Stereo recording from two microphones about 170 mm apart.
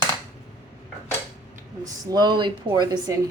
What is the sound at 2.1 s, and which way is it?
Speech, 25° right (ahead or behind).